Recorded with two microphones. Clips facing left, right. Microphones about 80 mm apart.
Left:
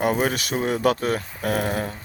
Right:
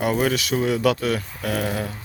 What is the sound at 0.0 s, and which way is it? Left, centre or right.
Speech, left.